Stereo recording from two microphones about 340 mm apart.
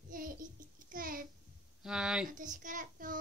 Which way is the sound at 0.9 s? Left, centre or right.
Right.